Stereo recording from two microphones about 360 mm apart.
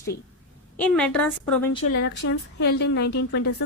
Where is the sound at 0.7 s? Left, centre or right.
Centre.